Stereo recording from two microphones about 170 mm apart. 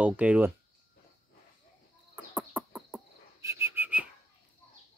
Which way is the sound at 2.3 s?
5° right (ahead or behind).